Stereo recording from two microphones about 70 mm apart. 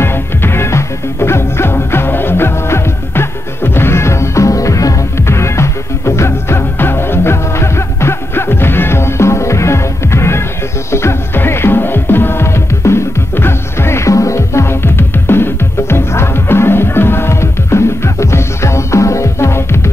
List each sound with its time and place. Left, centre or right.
0.0 s music: left